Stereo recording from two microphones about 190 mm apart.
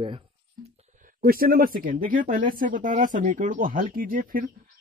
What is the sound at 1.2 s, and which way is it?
Speech, 50° right (ahead or behind).